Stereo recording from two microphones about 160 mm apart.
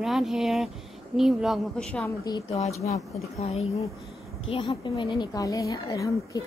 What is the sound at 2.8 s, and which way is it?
Speech, 20° left (ahead or behind).